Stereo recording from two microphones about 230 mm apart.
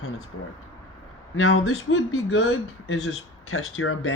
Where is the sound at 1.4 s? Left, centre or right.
Left.